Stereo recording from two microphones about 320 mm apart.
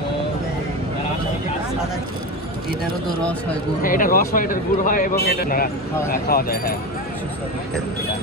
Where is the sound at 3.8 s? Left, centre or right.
Left.